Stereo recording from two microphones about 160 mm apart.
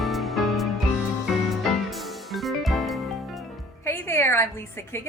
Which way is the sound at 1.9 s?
Centre (ahead or behind).